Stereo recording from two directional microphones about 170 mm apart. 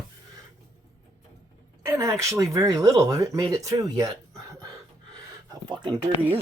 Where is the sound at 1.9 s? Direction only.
20° right (ahead or behind).